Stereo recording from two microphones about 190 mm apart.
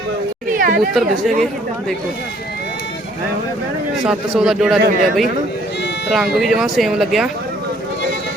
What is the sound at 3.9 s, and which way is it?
Speech, 5° right (ahead or behind).